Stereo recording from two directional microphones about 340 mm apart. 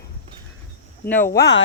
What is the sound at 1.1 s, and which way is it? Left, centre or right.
Speech, centre.